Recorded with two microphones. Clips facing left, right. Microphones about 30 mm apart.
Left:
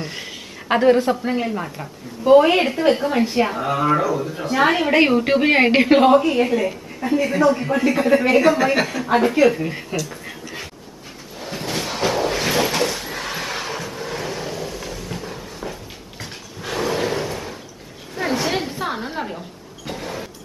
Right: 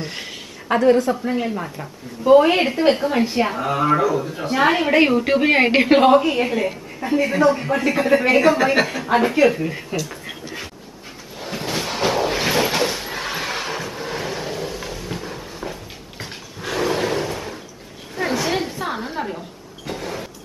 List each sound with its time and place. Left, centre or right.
0.0 s a sound: centre
0.7 s a woman's voice: left
1.4 s a woman's voice: centre
9.9 s speech: centre
11.3 s a sound: centre
19.9 s vehicle: centre